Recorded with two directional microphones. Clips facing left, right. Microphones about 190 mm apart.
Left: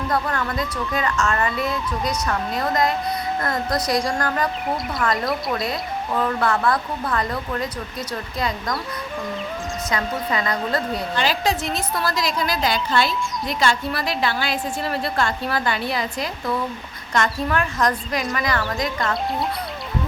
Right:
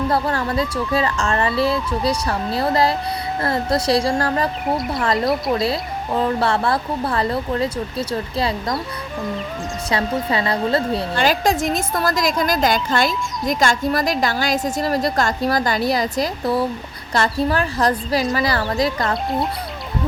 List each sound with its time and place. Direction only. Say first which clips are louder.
0.1 s speech: right 3 dB; 30° right (ahead or behind)
9.9 s speech: right 4 dB; 30° right (ahead or behind)
11.2 s a woman's voice: right 4 dB; 45° right (ahead or behind)